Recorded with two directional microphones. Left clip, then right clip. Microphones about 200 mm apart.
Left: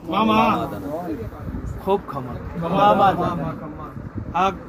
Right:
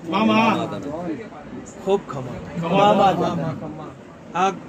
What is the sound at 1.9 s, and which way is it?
Speech, 10° right (ahead or behind).